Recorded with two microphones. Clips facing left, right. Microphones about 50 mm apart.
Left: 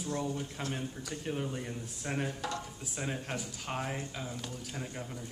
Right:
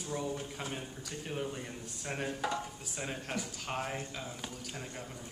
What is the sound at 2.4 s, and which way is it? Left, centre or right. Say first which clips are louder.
Speech: right 2 dB; centre.